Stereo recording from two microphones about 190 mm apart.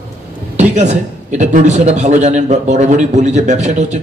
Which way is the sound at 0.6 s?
40° right (ahead or behind).